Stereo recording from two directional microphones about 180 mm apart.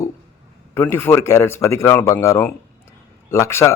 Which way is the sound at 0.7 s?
10° left (ahead or behind).